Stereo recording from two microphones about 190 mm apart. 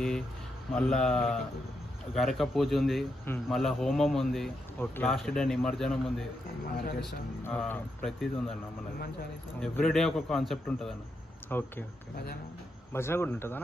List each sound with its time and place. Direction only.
0.7 s a man's voice: 5° left (ahead or behind)
6.8 s speech: 60° left (ahead or behind)
7.4 s a man's voice: 10° left (ahead or behind)
9.6 s a man's voice: centre (ahead or behind)
12.9 s a man's voice: 15° left (ahead or behind)